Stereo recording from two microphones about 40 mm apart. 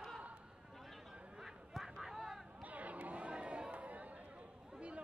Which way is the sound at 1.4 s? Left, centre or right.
Centre.